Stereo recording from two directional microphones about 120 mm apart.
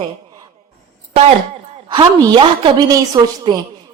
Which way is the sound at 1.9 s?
35° right (ahead or behind).